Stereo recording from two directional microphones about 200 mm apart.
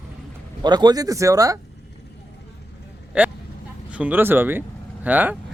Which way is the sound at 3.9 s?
5° right (ahead or behind).